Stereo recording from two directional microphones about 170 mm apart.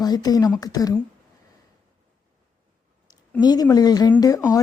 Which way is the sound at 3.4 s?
25° left (ahead or behind).